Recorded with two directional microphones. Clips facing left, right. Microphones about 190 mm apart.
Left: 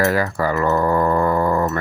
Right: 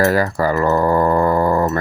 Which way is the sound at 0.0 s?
35° right (ahead or behind).